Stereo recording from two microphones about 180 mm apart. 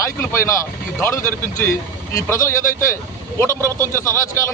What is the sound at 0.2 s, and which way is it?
Speech, 15° left (ahead or behind).